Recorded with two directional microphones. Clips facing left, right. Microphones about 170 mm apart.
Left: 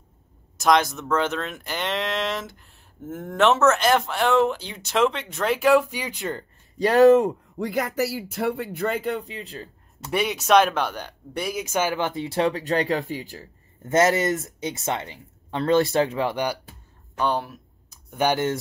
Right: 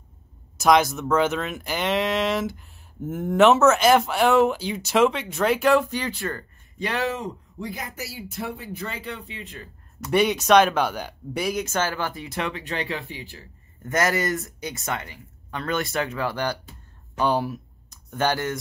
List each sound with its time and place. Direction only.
0.6 s speech: 5° right (ahead or behind); by 6.4 s 20° left (ahead or behind)
6.8 s speech: 40° left (ahead or behind)
7.5 s speech: 65° left (ahead or behind)
8.7 s speech: 55° left (ahead or behind); by 10.1 s 30° left (ahead or behind)
10.1 s speech: centre (ahead or behind)
11.6 s speech: 15° left (ahead or behind); by 13.5 s 40° left (ahead or behind)
13.8 s speech: 25° left (ahead or behind)
17.2 s a sound: 5° right (ahead or behind)
18.1 s speech: 15° left (ahead or behind)